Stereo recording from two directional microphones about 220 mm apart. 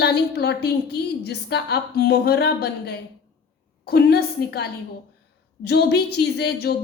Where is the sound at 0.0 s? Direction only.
50° left (ahead or behind).